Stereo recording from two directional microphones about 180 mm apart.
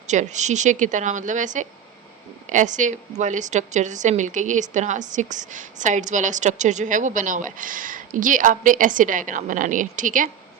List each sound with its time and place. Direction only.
0.1 s a woman's voice: 40° right (ahead or behind)